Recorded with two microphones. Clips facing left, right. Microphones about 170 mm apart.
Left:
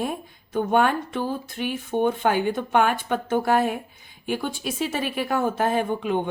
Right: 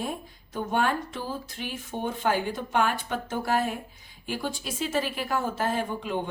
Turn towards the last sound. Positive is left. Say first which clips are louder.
# left 6 dB
turn(degrees=60)  # may be behind; listen again after turning